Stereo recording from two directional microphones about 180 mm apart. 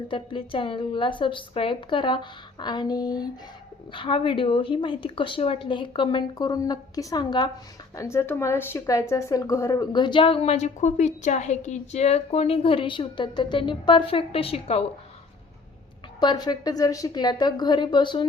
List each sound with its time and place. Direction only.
0.1 s speech: 30° left (ahead or behind)
16.2 s speech: 20° left (ahead or behind)